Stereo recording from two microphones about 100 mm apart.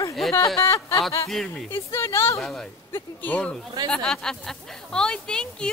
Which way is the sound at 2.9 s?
20° left (ahead or behind).